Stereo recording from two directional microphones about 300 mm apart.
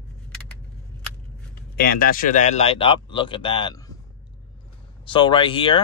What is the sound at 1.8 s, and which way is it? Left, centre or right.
Speech, left.